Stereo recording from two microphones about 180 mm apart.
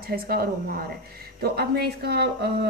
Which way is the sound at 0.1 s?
55° right (ahead or behind).